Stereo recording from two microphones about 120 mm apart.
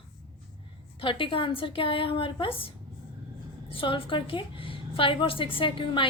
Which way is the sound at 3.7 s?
45° left (ahead or behind).